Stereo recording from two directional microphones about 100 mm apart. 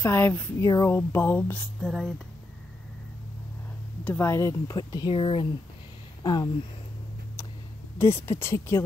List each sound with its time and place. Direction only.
0.0 s speech: 20° left (ahead or behind)
0.6 s speech: 40° left (ahead or behind)
0.8 s speech: 25° left (ahead or behind)
1.8 s speech: centre (ahead or behind)
4.0 s speech: 20° left (ahead or behind); by 5.1 s 45° left (ahead or behind)
5.1 s speech: 60° left (ahead or behind)
6.2 s speech: 45° left (ahead or behind)
8.0 s speech: 25° left (ahead or behind)